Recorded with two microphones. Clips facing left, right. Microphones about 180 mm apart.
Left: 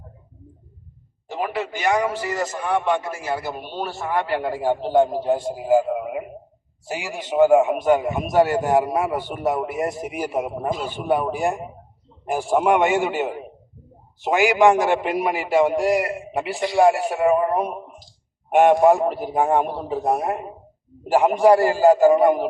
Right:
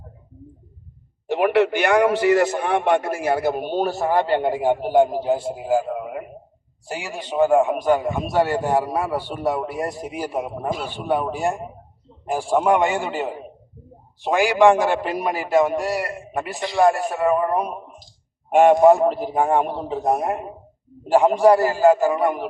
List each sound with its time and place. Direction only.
1.3 s a man's voice: 70° right (ahead or behind); by 4.8 s 20° right (ahead or behind)
4.8 s a man's voice: 10° right (ahead or behind); by 10.2 s 20° left (ahead or behind)
10.3 s a man's voice: 5° left (ahead or behind)
12.2 s a man's voice: 20° left (ahead or behind)
14.8 s a man's voice: 15° left (ahead or behind)
22.0 s a man's voice: 20° left (ahead or behind)